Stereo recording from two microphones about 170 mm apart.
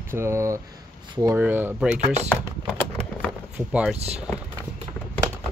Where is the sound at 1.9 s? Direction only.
45° right (ahead or behind).